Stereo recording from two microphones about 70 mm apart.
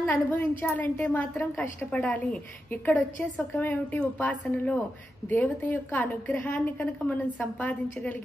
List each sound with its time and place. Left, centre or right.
0.0 s a woman's voice: left
1.9 s a woman's voice: centre